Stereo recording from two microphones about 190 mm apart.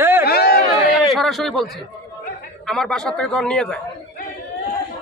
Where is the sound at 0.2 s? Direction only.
55° left (ahead or behind).